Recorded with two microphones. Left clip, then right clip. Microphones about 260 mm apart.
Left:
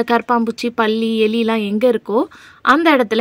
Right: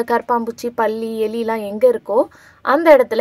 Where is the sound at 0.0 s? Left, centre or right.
Left.